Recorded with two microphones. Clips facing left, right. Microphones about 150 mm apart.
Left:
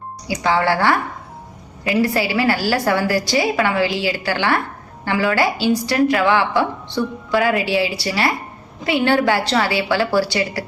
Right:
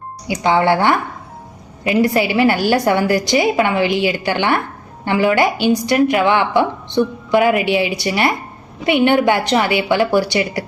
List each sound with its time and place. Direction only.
0.3 s a woman's voice: 20° right (ahead or behind)